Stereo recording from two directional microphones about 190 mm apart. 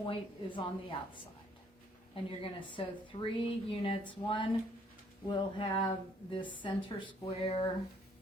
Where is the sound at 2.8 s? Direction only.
30° left (ahead or behind).